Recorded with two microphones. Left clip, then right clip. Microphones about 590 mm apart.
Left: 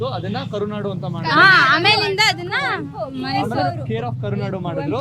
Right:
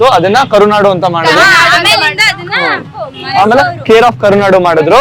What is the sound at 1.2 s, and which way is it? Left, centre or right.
Speech, left.